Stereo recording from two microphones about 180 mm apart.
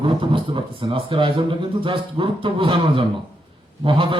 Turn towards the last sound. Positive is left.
turn(degrees=-30)  # may be behind; listen again after turning